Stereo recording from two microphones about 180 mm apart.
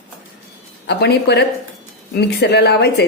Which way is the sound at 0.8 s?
65° left (ahead or behind).